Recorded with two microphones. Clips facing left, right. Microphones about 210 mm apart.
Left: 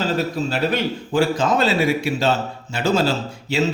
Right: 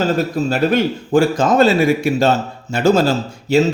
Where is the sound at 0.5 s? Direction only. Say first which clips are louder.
Right 7 dB; 45° right (ahead or behind).